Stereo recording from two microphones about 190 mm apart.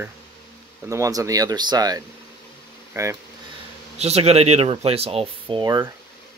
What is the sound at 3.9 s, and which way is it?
Speech, 35° right (ahead or behind).